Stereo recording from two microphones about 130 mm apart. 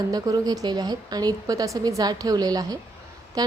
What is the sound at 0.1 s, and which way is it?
A woman's voice, 30° right (ahead or behind).